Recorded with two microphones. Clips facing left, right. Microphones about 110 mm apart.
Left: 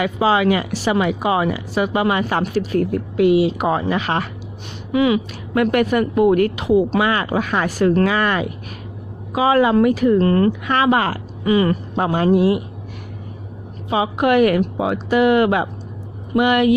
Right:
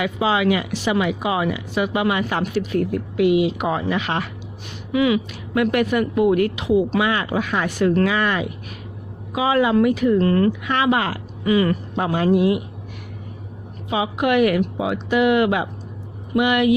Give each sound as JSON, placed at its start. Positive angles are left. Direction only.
{"t": 0.0, "sound": "speech", "side_deg": 40}
{"t": 5.5, "sound": "speech", "side_deg": 45}
{"t": 13.9, "sound": "speech", "side_deg": 40}